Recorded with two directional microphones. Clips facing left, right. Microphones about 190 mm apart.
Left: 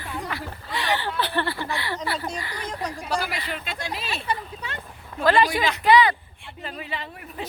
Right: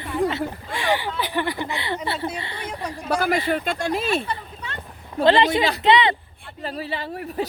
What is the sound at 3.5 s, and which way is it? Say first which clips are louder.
Speech: right 9 dB; 50° right (ahead or behind).